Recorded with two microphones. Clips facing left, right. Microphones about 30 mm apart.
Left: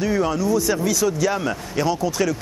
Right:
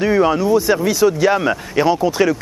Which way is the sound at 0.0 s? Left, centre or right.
Right.